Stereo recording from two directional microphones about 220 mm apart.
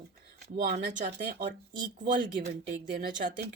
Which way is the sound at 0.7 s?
35° right (ahead or behind).